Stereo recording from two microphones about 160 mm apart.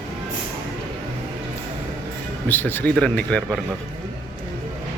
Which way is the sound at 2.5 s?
10° left (ahead or behind).